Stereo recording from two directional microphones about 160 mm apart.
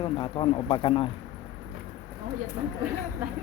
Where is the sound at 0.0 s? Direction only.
30° left (ahead or behind).